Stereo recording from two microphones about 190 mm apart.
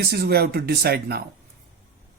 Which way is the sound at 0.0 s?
55° right (ahead or behind).